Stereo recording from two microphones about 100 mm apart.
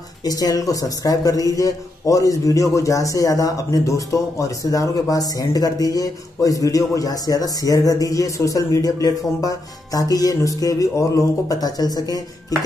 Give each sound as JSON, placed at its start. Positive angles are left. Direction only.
{"t": 0.2, "sound": "a man's voice", "side_deg": 40}